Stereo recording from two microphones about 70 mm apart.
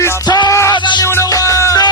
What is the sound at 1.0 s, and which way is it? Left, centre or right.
Music, left.